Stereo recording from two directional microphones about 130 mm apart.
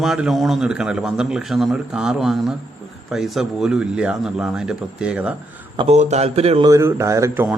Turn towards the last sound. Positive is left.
turn(degrees=-20)  # may be behind; listen again after turning